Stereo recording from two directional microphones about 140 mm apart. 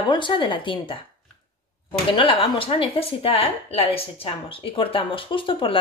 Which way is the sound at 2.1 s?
40° left (ahead or behind).